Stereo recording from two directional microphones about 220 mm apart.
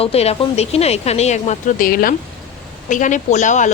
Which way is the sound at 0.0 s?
25° left (ahead or behind).